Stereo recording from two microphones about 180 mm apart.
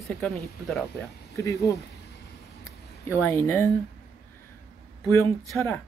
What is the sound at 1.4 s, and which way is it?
Speech, 20° left (ahead or behind).